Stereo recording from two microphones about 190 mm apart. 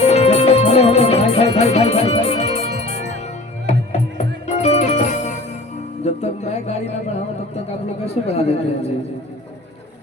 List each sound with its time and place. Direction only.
0.0 s music: 35° left (ahead or behind)
8.0 s speech: 35° left (ahead or behind)